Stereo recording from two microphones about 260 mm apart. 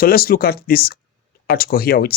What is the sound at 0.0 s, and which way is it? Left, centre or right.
Speech, left.